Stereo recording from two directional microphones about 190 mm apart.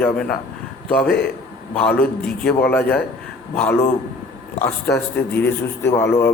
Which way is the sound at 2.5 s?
10° left (ahead or behind).